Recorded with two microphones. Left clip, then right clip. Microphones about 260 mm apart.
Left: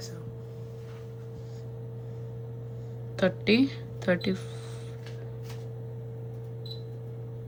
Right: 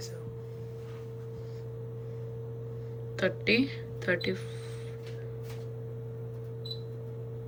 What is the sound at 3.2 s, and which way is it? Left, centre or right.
Speech, centre.